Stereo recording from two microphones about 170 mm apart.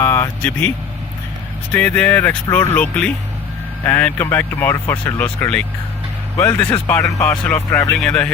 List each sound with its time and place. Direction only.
0.0 s speech: 15° left (ahead or behind)
1.7 s speech: 10° left (ahead or behind)